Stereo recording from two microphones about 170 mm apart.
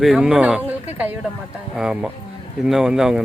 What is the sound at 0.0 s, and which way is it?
Speech, 5° right (ahead or behind).